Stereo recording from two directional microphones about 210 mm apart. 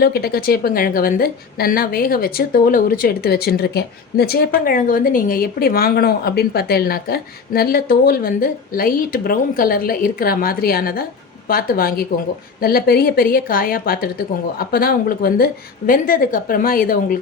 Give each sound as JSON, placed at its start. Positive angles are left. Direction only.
{"t": 0.0, "sound": "a woman's voice", "side_deg": 45}